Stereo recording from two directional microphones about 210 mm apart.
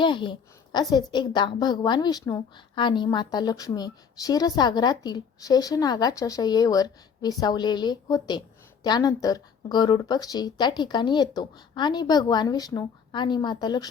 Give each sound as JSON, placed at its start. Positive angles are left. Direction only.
{"t": 0.0, "sound": "a woman's voice", "side_deg": 20}